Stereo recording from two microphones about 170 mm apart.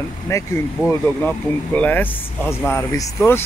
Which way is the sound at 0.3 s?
15° left (ahead or behind).